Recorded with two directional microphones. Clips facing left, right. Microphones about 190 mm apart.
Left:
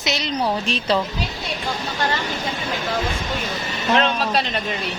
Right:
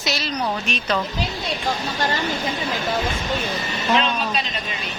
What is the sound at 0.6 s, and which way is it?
Speech, 30° left (ahead or behind).